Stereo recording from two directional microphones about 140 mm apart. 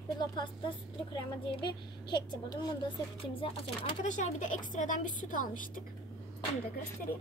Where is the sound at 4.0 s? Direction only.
60° left (ahead or behind).